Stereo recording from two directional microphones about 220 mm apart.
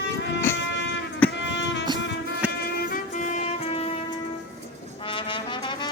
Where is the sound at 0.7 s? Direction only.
55° left (ahead or behind).